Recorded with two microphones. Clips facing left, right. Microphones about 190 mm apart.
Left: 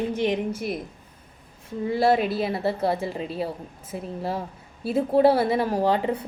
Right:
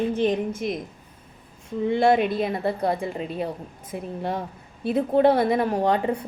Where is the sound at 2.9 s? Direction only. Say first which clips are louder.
Even; 30° left (ahead or behind).